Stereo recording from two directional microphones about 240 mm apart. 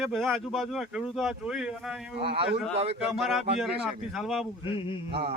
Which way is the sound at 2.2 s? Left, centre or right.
Right.